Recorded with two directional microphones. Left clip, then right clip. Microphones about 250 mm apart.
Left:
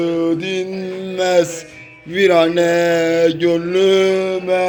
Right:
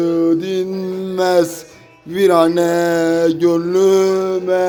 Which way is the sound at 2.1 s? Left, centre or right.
Centre.